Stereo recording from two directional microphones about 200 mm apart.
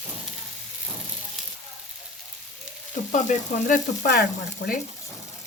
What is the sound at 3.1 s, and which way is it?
Frying, 40° left (ahead or behind).